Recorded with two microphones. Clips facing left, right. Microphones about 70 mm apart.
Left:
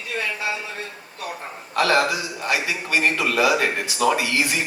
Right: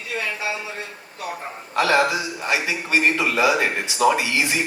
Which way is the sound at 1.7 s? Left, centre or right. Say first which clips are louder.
Right 1 dB; right.